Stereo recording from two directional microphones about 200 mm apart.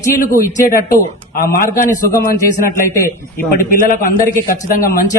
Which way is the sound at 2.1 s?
15° left (ahead or behind).